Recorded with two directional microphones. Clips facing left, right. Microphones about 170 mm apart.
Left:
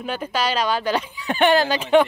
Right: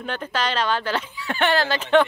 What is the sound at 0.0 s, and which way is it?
A woman's voice, 10° left (ahead or behind).